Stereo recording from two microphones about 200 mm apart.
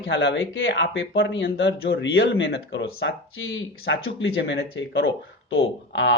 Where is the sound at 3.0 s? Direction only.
75° left (ahead or behind); by 5.1 s 55° left (ahead or behind).